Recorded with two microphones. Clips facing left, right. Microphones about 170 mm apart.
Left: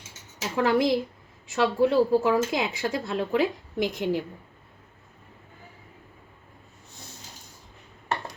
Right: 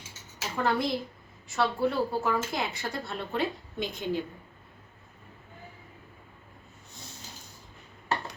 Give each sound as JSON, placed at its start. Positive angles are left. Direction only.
{"t": 0.5, "sound": "a woman's voice", "side_deg": 90}